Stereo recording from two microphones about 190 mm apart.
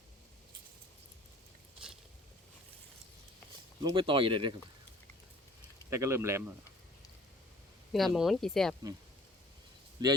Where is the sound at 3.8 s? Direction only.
25° right (ahead or behind).